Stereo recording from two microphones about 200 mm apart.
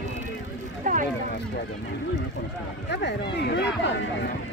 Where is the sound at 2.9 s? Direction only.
60° left (ahead or behind).